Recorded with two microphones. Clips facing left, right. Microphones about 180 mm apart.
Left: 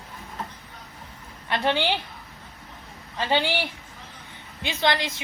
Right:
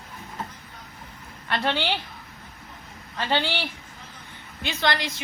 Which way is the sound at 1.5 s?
15° left (ahead or behind).